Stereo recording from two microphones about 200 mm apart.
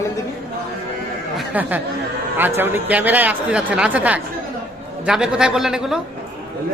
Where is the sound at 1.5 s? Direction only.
10° right (ahead or behind).